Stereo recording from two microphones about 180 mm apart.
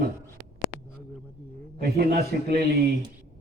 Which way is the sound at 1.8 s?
60° right (ahead or behind).